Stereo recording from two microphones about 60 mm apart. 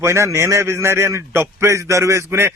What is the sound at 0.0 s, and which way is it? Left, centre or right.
A man's voice, right.